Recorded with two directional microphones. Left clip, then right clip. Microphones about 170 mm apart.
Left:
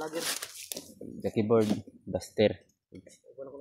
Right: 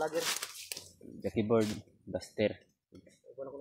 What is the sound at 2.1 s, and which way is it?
Speech, 70° left (ahead or behind).